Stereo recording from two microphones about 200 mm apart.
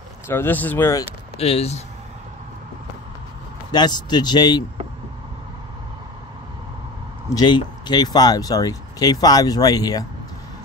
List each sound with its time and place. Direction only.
0.3 s speech: 10° left (ahead or behind)
1.4 s speech: 30° left (ahead or behind)
3.7 s speech: 20° left (ahead or behind)
7.3 s speech: 20° left (ahead or behind)